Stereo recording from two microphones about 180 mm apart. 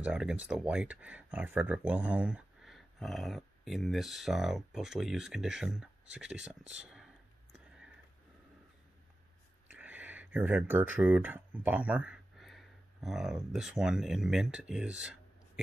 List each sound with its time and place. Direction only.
0.0 s speech: 5° right (ahead or behind)
7.5 s a sound: 5° right (ahead or behind)
9.7 s speech: 10° right (ahead or behind)